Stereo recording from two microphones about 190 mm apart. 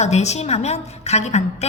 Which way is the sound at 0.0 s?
35° left (ahead or behind).